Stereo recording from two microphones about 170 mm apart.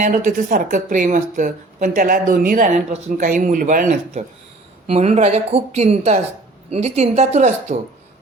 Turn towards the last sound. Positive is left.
turn(degrees=-45)  # may be behind; listen again after turning